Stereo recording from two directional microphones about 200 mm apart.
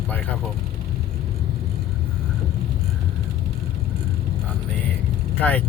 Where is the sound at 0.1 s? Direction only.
10° left (ahead or behind).